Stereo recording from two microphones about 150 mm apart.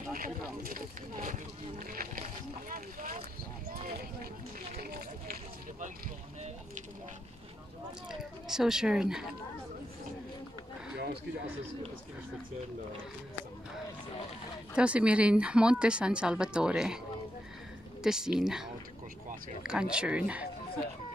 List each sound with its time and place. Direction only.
0.1 s speech: 70° right (ahead or behind)
1.9 s speech: 70° right (ahead or behind)
2.7 s speech: 60° right (ahead or behind)
4.7 s speech: 90° right
8.2 s speech: 5° right (ahead or behind)
14.8 s a woman's voice: 10° right (ahead or behind)
18.0 s a woman's voice: 5° right (ahead or behind)